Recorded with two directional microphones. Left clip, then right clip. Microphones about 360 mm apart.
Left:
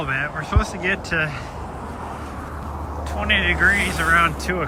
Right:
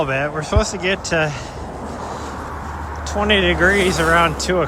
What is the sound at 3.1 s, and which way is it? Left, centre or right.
Speech, centre.